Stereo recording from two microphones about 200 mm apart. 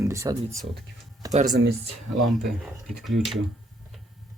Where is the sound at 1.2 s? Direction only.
15° right (ahead or behind).